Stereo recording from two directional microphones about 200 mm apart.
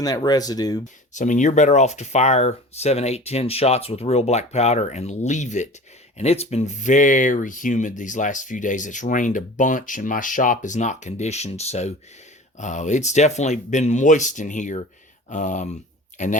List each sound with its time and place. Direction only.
0.0 s speech: 20° left (ahead or behind)
1.1 s speech: 40° left (ahead or behind)